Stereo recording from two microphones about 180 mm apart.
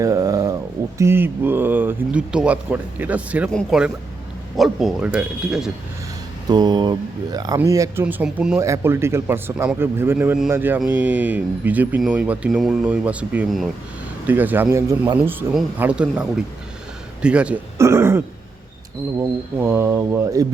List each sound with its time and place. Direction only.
0.0 s a man's voice: 20° right (ahead or behind); by 5.7 s 5° right (ahead or behind)
6.5 s speech: 20° right (ahead or behind)
15.5 s speech: 5° right (ahead or behind)
17.2 s speech: 5° right (ahead or behind)
19.2 s speech: 10° right (ahead or behind)